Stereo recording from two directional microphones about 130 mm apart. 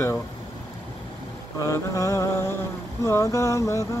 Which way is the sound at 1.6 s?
25° left (ahead or behind).